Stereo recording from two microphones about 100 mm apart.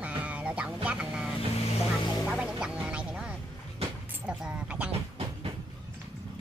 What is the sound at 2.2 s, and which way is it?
Music, 10° right (ahead or behind).